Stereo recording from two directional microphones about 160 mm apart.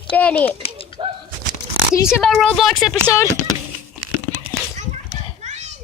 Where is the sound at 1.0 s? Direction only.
30° right (ahead or behind).